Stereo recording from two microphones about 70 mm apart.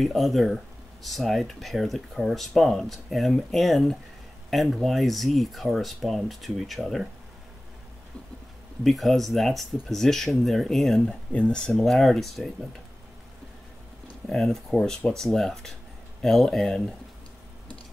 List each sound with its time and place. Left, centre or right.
0.0 s speech: centre
8.8 s speech: centre
14.3 s speech: centre